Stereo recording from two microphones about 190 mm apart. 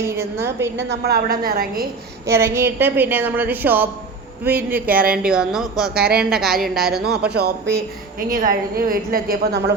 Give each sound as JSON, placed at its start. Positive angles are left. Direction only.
{"t": 0.0, "sound": "a woman's voice", "side_deg": -15}
{"t": 0.8, "sound": "a woman's voice", "side_deg": -60}
{"t": 2.2, "sound": "a woman's voice", "side_deg": -15}
{"t": 6.9, "sound": "speech", "side_deg": -55}
{"t": 8.3, "sound": "a woman's voice", "side_deg": -45}